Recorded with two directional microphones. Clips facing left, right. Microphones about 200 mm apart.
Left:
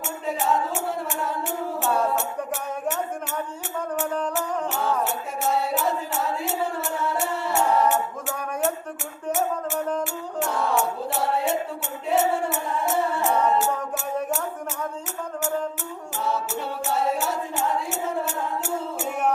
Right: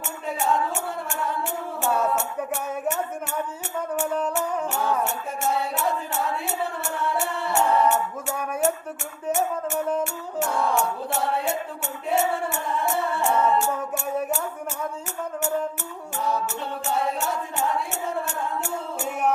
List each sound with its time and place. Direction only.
3.9 s music: 5° right (ahead or behind)
16.8 s music: centre (ahead or behind)